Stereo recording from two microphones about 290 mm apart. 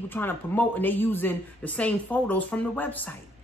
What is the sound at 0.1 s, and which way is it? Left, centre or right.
A woman's voice, centre.